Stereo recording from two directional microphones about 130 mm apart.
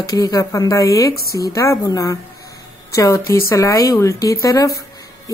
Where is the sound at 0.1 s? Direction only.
30° left (ahead or behind).